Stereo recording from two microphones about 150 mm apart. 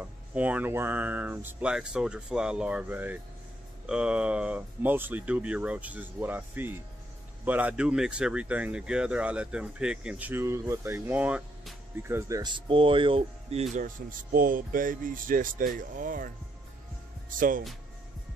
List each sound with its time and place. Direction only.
0.0 s speech: 10° right (ahead or behind); by 13.7 s 40° right (ahead or behind)
13.7 s speech: 65° right (ahead or behind)
17.3 s speech: 65° right (ahead or behind)